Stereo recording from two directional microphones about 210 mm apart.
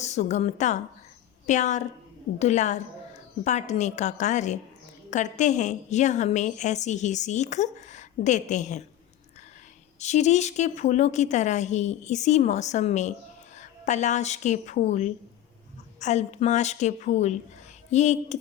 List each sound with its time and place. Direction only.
0.0 s a woman's voice: 35° left (ahead or behind)
10.0 s a woman's voice: 35° left (ahead or behind)